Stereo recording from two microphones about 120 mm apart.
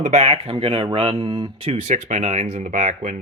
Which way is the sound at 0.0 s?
70° right (ahead or behind).